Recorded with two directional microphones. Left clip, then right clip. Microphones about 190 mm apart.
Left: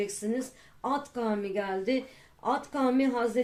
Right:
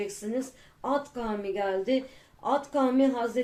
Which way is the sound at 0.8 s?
35° left (ahead or behind).